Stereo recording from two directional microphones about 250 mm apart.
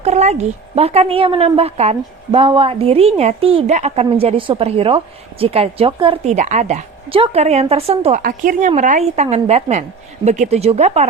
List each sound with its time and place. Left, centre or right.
0.0 s a woman's voice: right